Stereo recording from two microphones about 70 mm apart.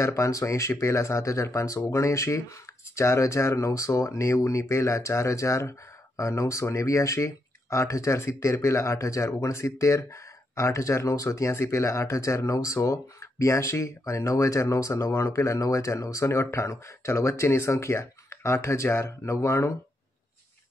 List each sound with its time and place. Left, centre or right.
0.0 s speech: left